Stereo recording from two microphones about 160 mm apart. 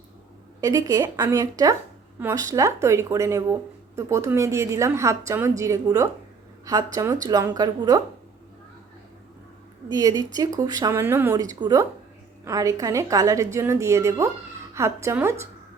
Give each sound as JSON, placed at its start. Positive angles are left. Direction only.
{"t": 0.6, "sound": "a woman's voice", "side_deg": -20}
{"t": 9.9, "sound": "a woman's voice", "side_deg": -25}